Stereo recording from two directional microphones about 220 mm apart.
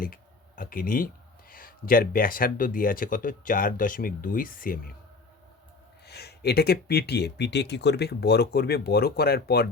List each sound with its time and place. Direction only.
0.0 s speech: 40° left (ahead or behind)
6.1 s speech: 45° left (ahead or behind)